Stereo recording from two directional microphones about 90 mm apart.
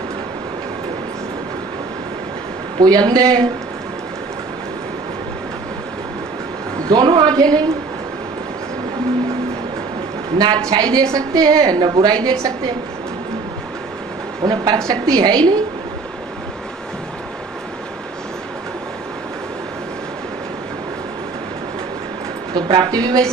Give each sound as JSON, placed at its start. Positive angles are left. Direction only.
{"t": 2.8, "sound": "a woman's voice", "side_deg": -50}
{"t": 6.9, "sound": "a sound", "side_deg": -55}
{"t": 10.3, "sound": "a woman's voice", "side_deg": -50}
{"t": 14.4, "sound": "a woman's voice", "side_deg": -50}
{"t": 22.5, "sound": "a woman's voice", "side_deg": -55}